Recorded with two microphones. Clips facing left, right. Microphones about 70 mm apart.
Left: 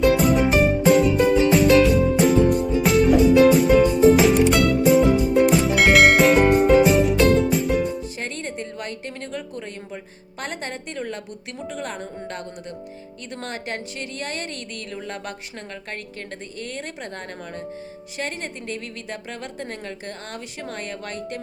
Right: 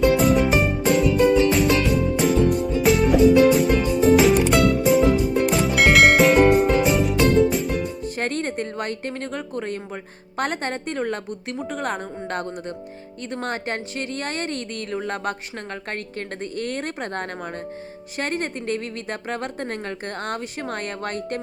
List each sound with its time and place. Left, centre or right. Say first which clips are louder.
0.0 s music: even; centre
8.0 s music: right 5 dB; right
11.7 s a woman's voice: right 3 dB; right
16.6 s a woman's voice: right 5 dB; right